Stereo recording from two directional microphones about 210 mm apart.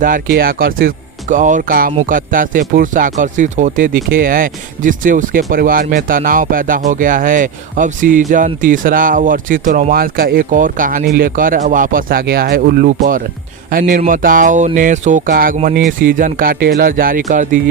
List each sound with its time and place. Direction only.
0.0 s speech: 45° right (ahead or behind)